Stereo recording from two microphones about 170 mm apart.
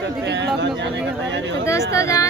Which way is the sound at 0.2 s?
90° right.